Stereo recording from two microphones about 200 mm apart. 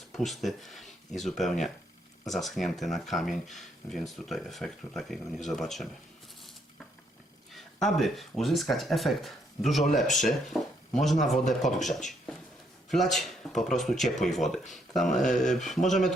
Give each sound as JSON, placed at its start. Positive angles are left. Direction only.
{"t": 0.2, "sound": "speech", "side_deg": 0}
{"t": 7.5, "sound": "speech", "side_deg": 0}